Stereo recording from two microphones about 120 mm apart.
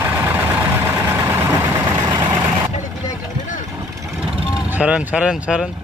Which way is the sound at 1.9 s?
40° right (ahead or behind).